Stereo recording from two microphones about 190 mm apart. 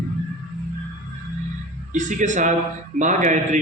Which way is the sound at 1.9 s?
40° right (ahead or behind).